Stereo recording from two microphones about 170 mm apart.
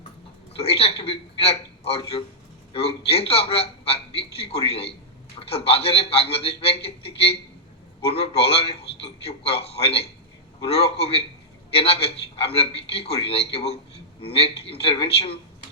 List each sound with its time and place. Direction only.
0.5 s a man's voice: 35° left (ahead or behind)